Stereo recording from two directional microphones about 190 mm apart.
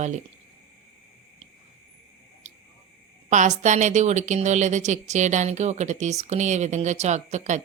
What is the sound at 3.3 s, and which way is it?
A woman's voice, 40° right (ahead or behind).